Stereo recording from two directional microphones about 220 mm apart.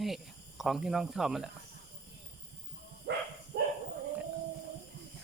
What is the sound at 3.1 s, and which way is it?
Bow-wow, 55° right (ahead or behind).